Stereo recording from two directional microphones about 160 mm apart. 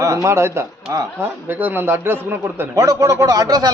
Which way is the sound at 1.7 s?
15° right (ahead or behind).